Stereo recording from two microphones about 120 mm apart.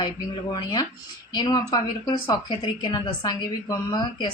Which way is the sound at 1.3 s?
35° left (ahead or behind).